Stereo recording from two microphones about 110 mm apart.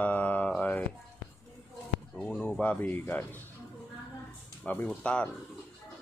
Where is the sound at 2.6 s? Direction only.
15° left (ahead or behind).